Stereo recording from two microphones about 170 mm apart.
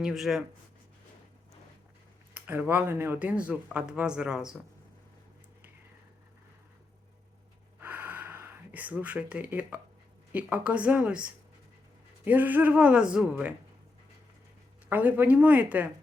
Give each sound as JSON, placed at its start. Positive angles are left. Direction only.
{"t": 0.0, "sound": "speech", "side_deg": 0}
{"t": 2.3, "sound": "speech", "side_deg": -10}
{"t": 7.8, "sound": "gasp", "side_deg": -10}
{"t": 10.3, "sound": "speech", "side_deg": -10}
{"t": 14.8, "sound": "speech", "side_deg": -10}